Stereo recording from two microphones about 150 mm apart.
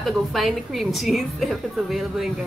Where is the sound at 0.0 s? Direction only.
Centre (ahead or behind).